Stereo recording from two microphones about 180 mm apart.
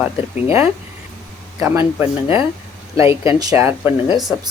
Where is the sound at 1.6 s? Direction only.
5° right (ahead or behind).